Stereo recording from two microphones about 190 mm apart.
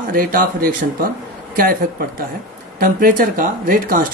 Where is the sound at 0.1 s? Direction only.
50° right (ahead or behind).